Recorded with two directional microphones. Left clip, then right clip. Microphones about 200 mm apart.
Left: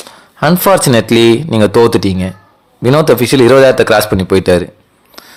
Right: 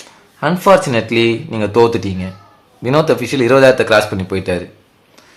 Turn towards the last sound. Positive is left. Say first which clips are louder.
# left 9 dB
turn(degrees=40)  # may be behind; listen again after turning